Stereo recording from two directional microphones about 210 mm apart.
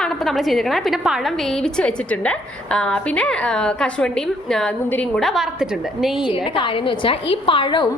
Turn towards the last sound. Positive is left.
turn(degrees=20)  # may be behind; listen again after turning